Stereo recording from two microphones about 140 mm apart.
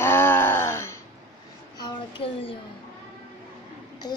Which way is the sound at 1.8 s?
40° left (ahead or behind).